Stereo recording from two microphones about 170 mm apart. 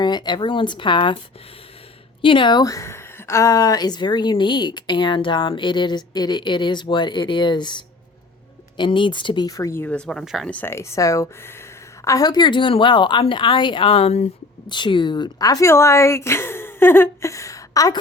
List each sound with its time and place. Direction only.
0.0 s a woman's voice: 25° left (ahead or behind)
2.2 s a woman's voice: 30° left (ahead or behind)
14.7 s a woman's voice: 25° left (ahead or behind)